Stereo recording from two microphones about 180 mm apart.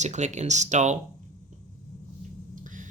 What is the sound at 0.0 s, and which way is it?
Speech, 40° right (ahead or behind).